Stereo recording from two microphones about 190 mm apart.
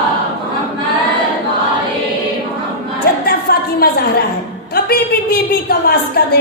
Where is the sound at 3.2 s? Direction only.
55° left (ahead or behind).